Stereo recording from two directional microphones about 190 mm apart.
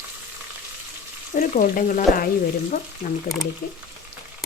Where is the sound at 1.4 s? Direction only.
45° left (ahead or behind).